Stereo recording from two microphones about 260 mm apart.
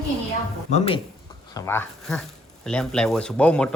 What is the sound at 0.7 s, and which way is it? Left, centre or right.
Speech, left.